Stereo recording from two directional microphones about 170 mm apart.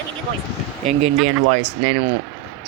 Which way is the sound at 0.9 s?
40° right (ahead or behind).